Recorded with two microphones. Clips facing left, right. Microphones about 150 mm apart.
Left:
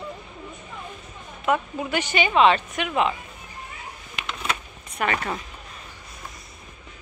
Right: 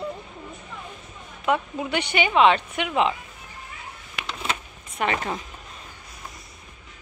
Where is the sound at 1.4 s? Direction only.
15° right (ahead or behind).